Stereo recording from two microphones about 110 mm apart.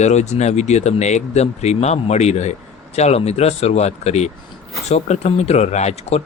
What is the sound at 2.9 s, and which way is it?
Speech, 80° left.